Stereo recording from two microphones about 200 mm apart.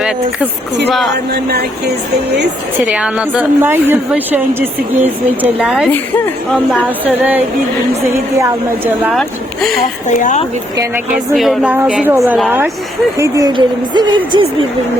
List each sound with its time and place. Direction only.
0.9 s speech: centre (ahead or behind)
1.3 s speech: 50° right (ahead or behind)
2.9 s a woman's voice: 5° right (ahead or behind)
9.0 s speech: centre (ahead or behind)
10.1 s speech: 40° left (ahead or behind)
10.8 s a woman's voice: 10° right (ahead or behind)
11.3 s a woman's voice: centre (ahead or behind); by 14.4 s 20° right (ahead or behind)